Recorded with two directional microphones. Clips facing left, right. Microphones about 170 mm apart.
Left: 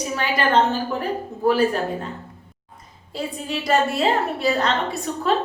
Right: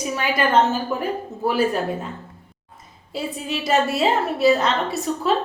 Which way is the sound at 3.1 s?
5° right (ahead or behind).